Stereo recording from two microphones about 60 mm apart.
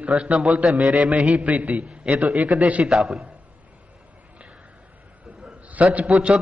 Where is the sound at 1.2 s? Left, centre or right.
Centre.